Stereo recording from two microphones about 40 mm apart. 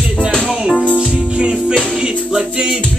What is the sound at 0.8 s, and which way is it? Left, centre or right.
Music, left.